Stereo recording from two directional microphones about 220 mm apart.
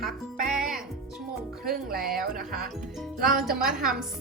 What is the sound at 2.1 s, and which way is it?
A woman's voice, 40° right (ahead or behind).